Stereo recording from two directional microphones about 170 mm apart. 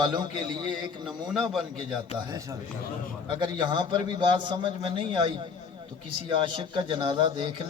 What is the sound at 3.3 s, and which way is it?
A man's voice, 25° right (ahead or behind).